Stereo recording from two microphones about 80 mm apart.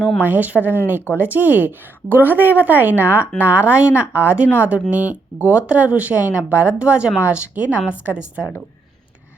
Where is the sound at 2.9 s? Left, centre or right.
Left.